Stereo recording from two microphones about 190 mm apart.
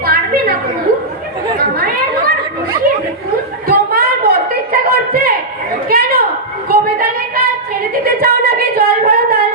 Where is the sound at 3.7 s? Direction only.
50° right (ahead or behind).